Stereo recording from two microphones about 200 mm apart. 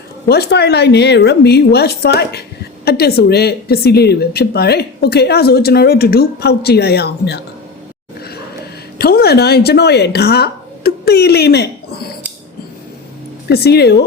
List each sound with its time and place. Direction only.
0.3 s a woman's voice: 55° left (ahead or behind)
9.0 s speech: 50° left (ahead or behind)
13.5 s a woman's voice: 55° left (ahead or behind)